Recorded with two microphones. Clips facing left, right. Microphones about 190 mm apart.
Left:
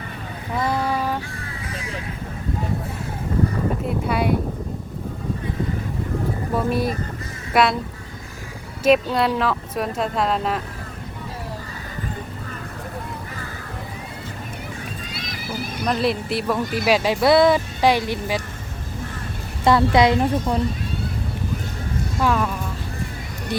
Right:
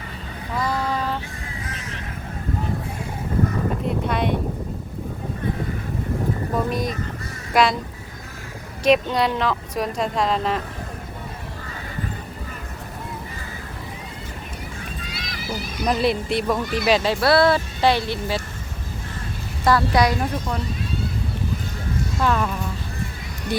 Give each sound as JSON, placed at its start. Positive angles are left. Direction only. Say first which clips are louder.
{"t": 0.5, "sound": "a sound", "louder": "left 2 dB", "side_deg": 15}
{"t": 3.8, "sound": "boat", "louder": "left 2 dB", "side_deg": 5}
{"t": 6.7, "sound": "speech", "louder": "left 3 dB", "side_deg": 5}
{"t": 8.8, "sound": "speech", "louder": "left 1 dB", "side_deg": 5}
{"t": 15.9, "sound": "speech", "louder": "right 1 dB", "side_deg": 0}
{"t": 19.6, "sound": "a woman's voice", "louder": "left 3 dB", "side_deg": 25}
{"t": 22.2, "sound": "speech", "louder": "left 1 dB", "side_deg": 5}
{"t": 23.5, "sound": "speech", "louder": "right 1 dB", "side_deg": 0}